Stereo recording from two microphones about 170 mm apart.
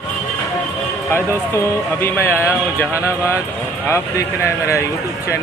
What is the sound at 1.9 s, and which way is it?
Speech, 15° left (ahead or behind).